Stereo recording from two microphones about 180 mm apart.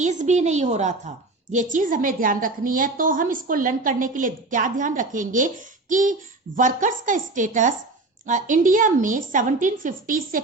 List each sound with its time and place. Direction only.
0.0 s a woman's voice: 40° right (ahead or behind)